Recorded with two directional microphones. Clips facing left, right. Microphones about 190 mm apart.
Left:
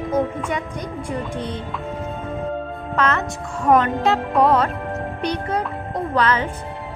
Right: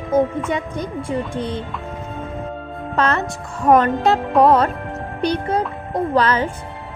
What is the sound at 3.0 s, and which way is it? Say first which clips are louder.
Music: right 2 dB; 35° right (ahead or behind).